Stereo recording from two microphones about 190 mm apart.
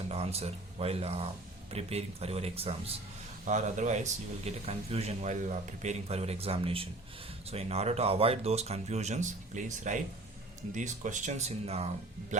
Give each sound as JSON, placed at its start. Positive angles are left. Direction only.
{"t": 0.1, "sound": "speech", "side_deg": -30}